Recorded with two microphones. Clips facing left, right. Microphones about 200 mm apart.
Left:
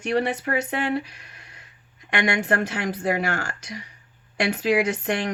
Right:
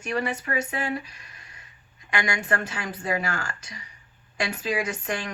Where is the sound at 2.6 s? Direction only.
70° left (ahead or behind).